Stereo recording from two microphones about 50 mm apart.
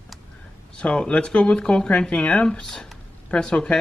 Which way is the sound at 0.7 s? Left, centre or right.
Centre.